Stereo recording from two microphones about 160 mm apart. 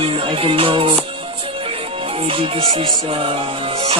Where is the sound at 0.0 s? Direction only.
35° right (ahead or behind).